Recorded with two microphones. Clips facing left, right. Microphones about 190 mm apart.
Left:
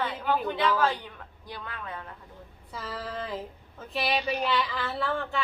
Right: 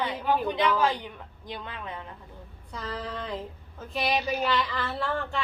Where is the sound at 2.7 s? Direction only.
5° left (ahead or behind).